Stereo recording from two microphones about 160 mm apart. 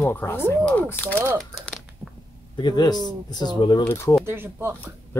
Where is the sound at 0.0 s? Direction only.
15° left (ahead or behind).